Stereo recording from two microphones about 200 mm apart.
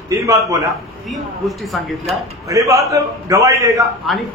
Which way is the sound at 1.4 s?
Centre (ahead or behind).